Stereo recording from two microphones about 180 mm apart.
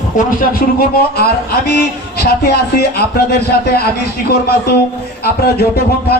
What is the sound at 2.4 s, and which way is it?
Speech, 60° left (ahead or behind).